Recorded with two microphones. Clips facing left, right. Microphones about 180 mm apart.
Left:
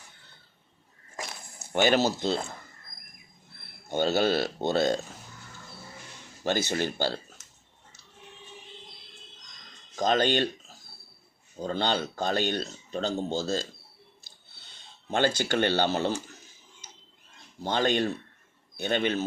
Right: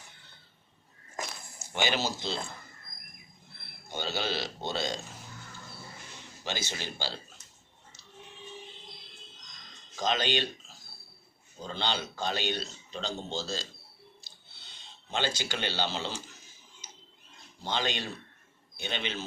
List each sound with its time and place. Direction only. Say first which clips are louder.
1.5 s a sound: left 8 dB; 50° left (ahead or behind)
3.9 s speech: left 9 dB; 50° left (ahead or behind)
6.4 s speech: left 10 dB; 55° left (ahead or behind)
10.0 s speech: left 5 dB; 50° left (ahead or behind)
11.6 s speech: left 6 dB; 50° left (ahead or behind)
15.1 s speech: left 7 dB; 55° left (ahead or behind)
17.6 s speech: left 7 dB; 50° left (ahead or behind)